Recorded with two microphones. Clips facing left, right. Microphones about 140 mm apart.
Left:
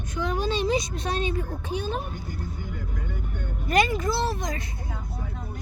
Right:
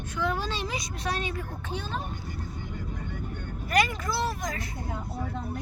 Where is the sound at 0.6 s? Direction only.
25° left (ahead or behind).